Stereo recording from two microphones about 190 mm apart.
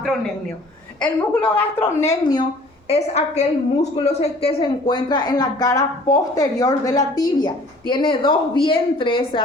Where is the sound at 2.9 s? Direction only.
35° left (ahead or behind).